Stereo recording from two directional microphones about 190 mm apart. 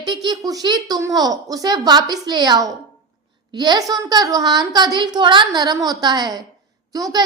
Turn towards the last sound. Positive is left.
turn(degrees=-20)  # may be behind; listen again after turning